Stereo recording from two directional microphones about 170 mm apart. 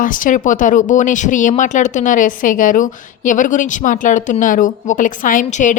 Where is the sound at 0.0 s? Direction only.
50° left (ahead or behind).